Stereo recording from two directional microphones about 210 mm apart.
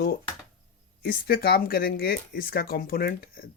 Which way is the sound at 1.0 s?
45° left (ahead or behind).